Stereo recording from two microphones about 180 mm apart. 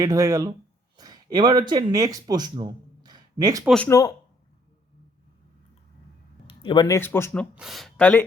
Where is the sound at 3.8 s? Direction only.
15° left (ahead or behind).